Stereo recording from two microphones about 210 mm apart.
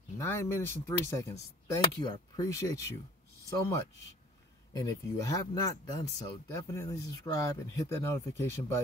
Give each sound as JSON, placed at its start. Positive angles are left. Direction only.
{"t": 0.2, "sound": "speech", "side_deg": 10}